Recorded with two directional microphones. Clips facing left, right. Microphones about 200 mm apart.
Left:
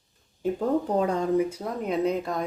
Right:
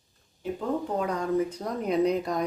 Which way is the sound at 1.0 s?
30° left (ahead or behind).